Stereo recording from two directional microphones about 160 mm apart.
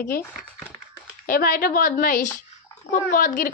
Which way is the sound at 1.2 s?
60° left (ahead or behind).